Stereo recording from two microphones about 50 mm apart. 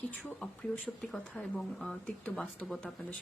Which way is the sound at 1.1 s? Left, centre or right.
Centre.